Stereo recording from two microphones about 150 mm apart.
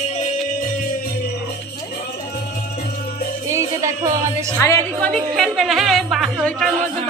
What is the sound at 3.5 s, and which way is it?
Music, 20° right (ahead or behind).